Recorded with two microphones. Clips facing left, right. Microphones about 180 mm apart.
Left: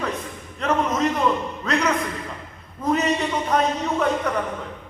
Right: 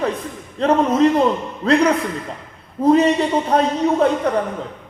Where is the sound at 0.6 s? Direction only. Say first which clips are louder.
Right 7 dB; 30° right (ahead or behind).